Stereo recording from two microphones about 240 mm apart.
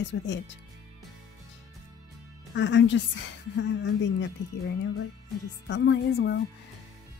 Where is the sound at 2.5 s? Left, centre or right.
Left.